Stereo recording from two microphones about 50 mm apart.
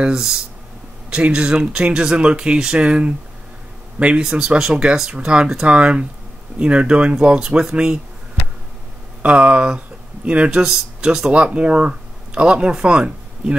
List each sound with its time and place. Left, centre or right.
0.0 s speech: centre
4.2 s speech: centre
9.2 s speech: right